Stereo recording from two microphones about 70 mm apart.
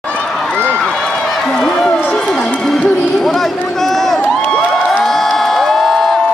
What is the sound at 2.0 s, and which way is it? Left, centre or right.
Music, centre.